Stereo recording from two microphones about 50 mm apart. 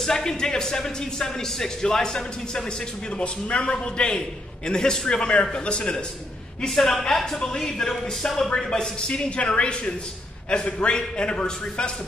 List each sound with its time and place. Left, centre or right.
0.0 s a man's voice: centre
6.7 s a woman's voice: centre